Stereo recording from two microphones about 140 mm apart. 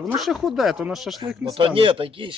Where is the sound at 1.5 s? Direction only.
40° right (ahead or behind).